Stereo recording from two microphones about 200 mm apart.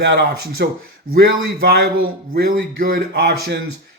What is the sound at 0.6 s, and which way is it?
A man's voice, 55° right (ahead or behind).